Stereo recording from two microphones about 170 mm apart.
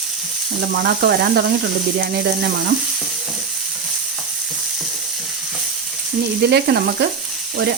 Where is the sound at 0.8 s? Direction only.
70° right (ahead or behind).